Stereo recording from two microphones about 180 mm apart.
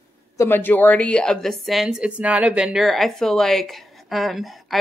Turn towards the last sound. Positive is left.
turn(degrees=0)  # may be behind; listen again after turning